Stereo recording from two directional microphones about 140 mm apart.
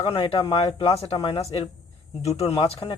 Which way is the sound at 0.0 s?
40° left (ahead or behind).